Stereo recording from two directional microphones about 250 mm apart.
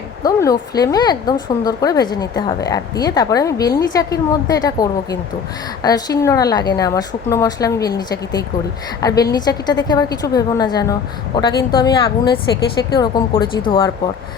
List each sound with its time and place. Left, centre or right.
0.2 s speech: centre